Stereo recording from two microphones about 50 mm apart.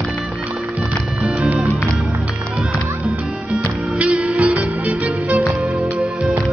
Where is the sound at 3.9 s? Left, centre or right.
Right.